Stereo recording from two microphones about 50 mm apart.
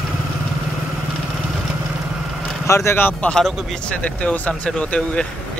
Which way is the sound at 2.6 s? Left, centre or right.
Left.